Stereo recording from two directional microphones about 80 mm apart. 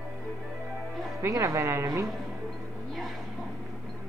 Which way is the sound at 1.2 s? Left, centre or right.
Right.